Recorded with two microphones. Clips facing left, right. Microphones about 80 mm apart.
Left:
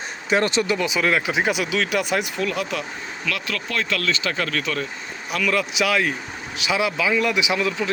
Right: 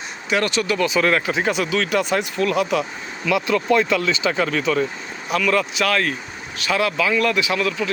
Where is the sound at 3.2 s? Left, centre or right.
Centre.